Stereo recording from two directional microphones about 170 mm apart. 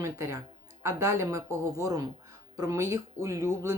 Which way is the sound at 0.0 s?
15° right (ahead or behind).